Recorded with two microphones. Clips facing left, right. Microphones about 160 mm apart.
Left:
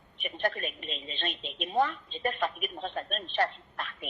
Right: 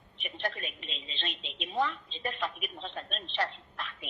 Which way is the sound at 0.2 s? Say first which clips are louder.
Left 5 dB; 50° left (ahead or behind).